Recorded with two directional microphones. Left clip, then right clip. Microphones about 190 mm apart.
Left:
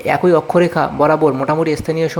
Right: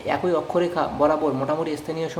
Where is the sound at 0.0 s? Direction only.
35° left (ahead or behind).